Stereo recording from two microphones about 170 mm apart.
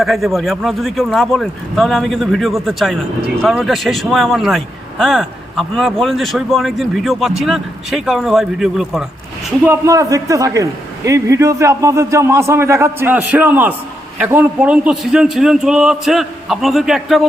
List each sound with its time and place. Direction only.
0.0 s a man's voice: centre (ahead or behind)
9.6 s a man's voice: 20° right (ahead or behind); by 17.2 s centre (ahead or behind)